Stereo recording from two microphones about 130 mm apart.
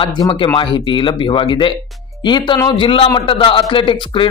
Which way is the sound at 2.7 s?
45° left (ahead or behind).